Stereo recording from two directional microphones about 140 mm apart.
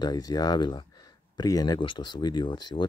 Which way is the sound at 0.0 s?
30° left (ahead or behind).